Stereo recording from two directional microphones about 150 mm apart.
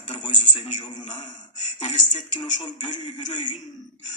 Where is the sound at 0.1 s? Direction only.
50° left (ahead or behind).